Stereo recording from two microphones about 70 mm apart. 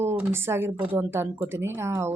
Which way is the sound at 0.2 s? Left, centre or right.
Right.